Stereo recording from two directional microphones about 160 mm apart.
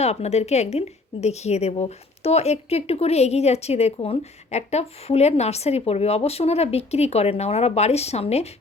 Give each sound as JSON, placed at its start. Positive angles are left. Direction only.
{"t": 0.0, "sound": "a woman's voice", "side_deg": 40}